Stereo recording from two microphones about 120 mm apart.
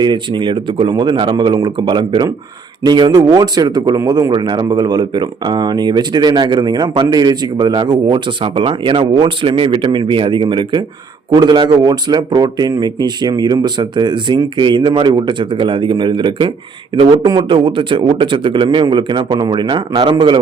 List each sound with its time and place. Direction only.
0.0 s speech: 40° right (ahead or behind)